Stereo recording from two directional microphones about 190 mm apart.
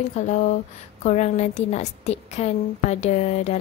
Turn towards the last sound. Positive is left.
turn(degrees=35)  # may be behind; listen again after turning